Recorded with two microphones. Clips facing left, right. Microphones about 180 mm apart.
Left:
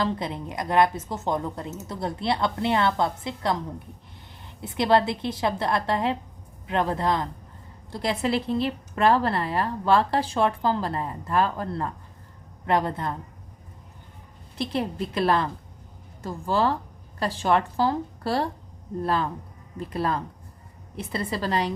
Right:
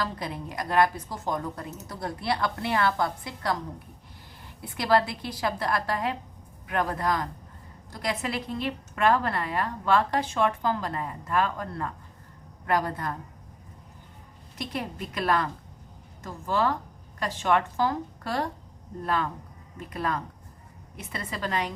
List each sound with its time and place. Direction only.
0.0 s a woman's voice: 25° left (ahead or behind)
4.6 s a woman's voice: 25° left (ahead or behind)
14.6 s a woman's voice: 30° left (ahead or behind)